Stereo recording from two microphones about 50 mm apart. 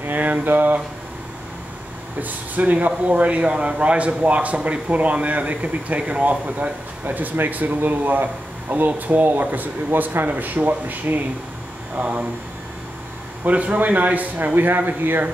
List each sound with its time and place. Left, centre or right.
0.0 s a sound: right
2.2 s speech: right
13.4 s speech: right